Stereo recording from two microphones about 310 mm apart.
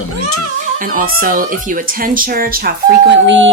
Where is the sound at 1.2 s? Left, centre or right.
Right.